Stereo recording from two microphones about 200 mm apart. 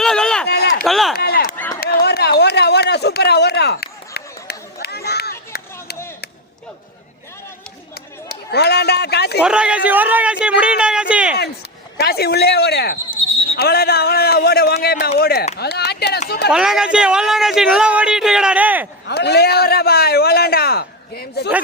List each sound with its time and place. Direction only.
0.0 s run: 5° left (ahead or behind)
0.4 s a sound: 55° left (ahead or behind)
0.9 s speech: centre (ahead or behind)
1.1 s chop: 55° left (ahead or behind)
1.5 s run: 10° left (ahead or behind)
1.8 s chop: 50° left (ahead or behind)
2.4 s a sound: 55° left (ahead or behind)
8.3 s speech: 55° left (ahead or behind)
9.4 s speech: 5° right (ahead or behind)
11.9 s a man's voice: 55° left (ahead or behind)
13.1 s a sound: 30° left (ahead or behind)
13.6 s a man's voice: 50° left (ahead or behind)
16.5 s speech: 5° right (ahead or behind)
19.0 s a man's voice: 55° left (ahead or behind)